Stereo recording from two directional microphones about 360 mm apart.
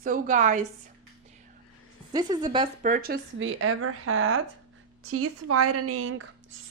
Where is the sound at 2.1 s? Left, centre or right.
Centre.